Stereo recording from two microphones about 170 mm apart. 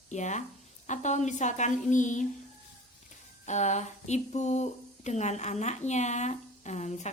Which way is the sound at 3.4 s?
45° left (ahead or behind).